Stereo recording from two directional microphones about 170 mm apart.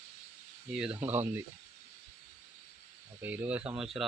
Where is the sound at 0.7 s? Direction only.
5° right (ahead or behind).